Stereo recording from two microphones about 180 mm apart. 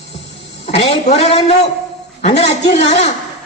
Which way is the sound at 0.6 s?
35° left (ahead or behind).